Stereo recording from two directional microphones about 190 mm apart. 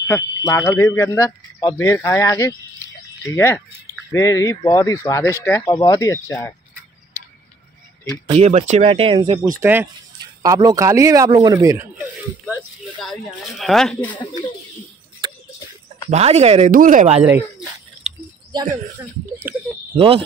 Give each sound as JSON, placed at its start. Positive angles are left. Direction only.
{"t": 0.0, "sound": "speech", "side_deg": 15}
{"t": 8.3, "sound": "speech", "side_deg": -35}
{"t": 9.6, "sound": "speech", "side_deg": -10}
{"t": 13.0, "sound": "speech", "side_deg": 0}
{"t": 16.1, "sound": "speech", "side_deg": -35}
{"t": 17.2, "sound": "speech", "side_deg": -10}
{"t": 18.5, "sound": "speech", "side_deg": -20}
{"t": 20.0, "sound": "speech", "side_deg": -30}